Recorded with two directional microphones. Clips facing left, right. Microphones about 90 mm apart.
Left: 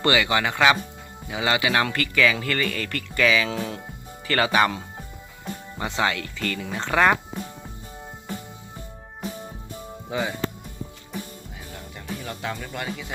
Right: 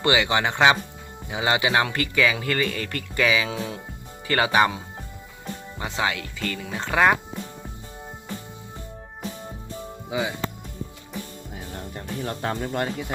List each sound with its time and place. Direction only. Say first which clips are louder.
0.0 s speech: even; 20° right (ahead or behind)
5.8 s speech: left 2 dB; 10° right (ahead or behind)
10.1 s speech: even; 10° right (ahead or behind)
11.9 s speech: right 3 dB; 40° right (ahead or behind)